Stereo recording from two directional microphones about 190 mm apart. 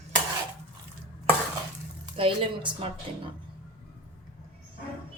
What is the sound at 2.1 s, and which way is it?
Speech, 30° right (ahead or behind).